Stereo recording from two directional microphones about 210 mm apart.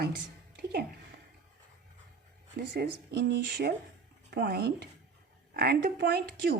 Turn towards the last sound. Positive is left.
turn(degrees=-50)  # may be behind; listen again after turning